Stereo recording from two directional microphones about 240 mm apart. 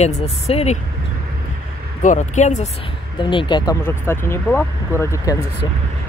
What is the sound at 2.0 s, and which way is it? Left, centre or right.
Speech, left.